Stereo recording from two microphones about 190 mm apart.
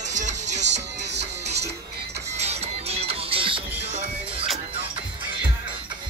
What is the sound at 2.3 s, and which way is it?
Music, 35° right (ahead or behind).